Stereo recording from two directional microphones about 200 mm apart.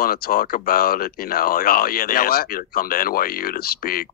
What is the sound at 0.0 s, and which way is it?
Speech, 45° left (ahead or behind).